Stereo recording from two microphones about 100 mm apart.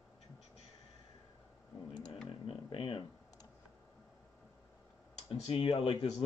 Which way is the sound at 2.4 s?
65° left (ahead or behind).